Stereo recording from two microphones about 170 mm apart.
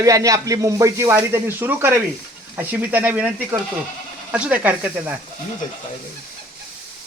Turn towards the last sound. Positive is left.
turn(degrees=-10)  # may be behind; listen again after turning